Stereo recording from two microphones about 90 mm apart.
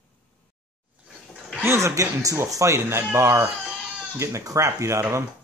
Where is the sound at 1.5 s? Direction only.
30° right (ahead or behind).